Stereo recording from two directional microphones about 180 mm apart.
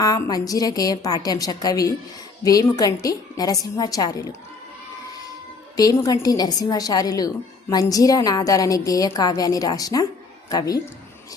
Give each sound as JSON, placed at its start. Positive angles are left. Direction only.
{"t": 0.0, "sound": "a woman's voice", "side_deg": 20}
{"t": 5.7, "sound": "a woman's voice", "side_deg": 20}